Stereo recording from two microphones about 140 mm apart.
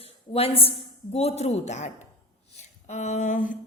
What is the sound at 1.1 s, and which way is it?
Speech, 45° left (ahead or behind).